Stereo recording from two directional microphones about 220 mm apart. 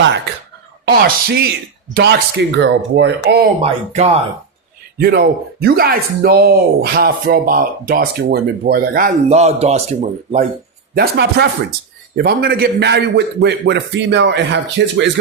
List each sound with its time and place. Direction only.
0.9 s speech: 45° right (ahead or behind)
3.6 s speech: 30° right (ahead or behind)
4.9 s speech: 45° right (ahead or behind)
10.9 s speech: 45° right (ahead or behind)